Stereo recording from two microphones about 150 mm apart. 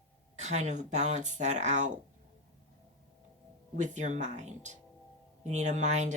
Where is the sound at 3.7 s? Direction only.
55° right (ahead or behind).